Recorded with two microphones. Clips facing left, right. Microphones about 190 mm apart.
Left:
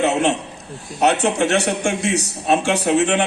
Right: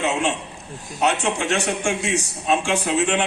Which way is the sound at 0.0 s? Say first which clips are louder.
Left 5 dB; 40° left (ahead or behind).